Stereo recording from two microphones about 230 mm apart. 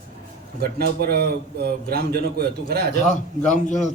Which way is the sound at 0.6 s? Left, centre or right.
Right.